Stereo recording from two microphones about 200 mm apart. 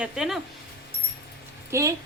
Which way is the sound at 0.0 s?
5° right (ahead or behind).